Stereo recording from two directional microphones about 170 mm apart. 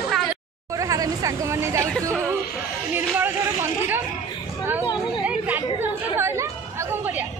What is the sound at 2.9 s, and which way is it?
Speech, 15° right (ahead or behind).